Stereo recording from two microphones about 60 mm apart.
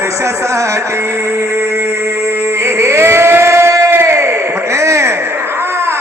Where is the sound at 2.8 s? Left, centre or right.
Right.